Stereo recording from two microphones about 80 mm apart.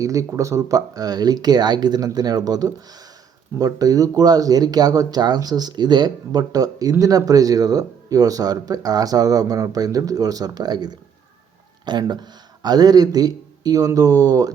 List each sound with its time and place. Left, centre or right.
0.0 s a man's voice: right